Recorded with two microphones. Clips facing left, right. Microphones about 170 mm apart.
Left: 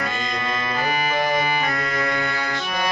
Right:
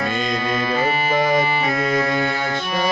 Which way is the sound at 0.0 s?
25° right (ahead or behind).